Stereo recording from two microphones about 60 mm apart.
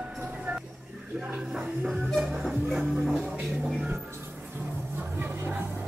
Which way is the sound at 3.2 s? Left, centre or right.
Right.